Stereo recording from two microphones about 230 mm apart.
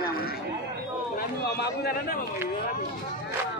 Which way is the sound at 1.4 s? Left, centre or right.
Left.